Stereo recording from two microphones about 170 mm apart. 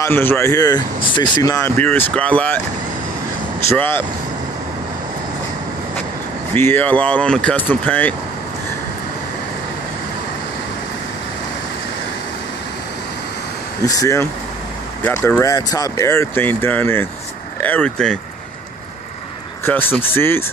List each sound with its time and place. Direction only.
0.0 s speech: 10° left (ahead or behind)
3.7 s speech: 10° left (ahead or behind)
6.5 s speech: 10° left (ahead or behind)
13.8 s speech: 20° left (ahead or behind)
19.6 s speech: 10° left (ahead or behind)